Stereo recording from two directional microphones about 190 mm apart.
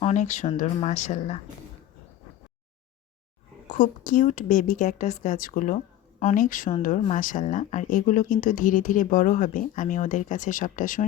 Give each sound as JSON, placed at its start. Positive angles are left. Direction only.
{"t": 0.0, "sound": "speech", "side_deg": 40}
{"t": 3.7, "sound": "speech", "side_deg": 45}